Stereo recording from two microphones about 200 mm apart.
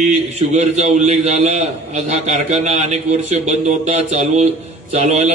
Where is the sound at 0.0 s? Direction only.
35° right (ahead or behind).